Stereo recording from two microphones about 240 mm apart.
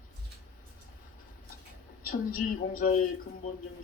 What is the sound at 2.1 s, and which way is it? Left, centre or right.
Speech, left.